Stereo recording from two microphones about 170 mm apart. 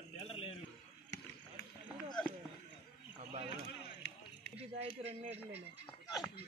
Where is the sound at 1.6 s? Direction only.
60° left (ahead or behind).